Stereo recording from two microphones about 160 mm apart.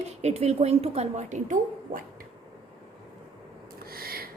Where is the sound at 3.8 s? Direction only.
70° right (ahead or behind).